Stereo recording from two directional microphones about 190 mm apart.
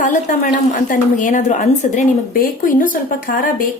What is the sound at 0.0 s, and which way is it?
A woman's voice, 40° left (ahead or behind).